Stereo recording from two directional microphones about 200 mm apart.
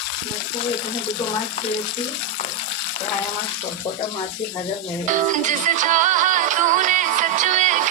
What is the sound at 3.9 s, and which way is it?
Speech, 20° left (ahead or behind).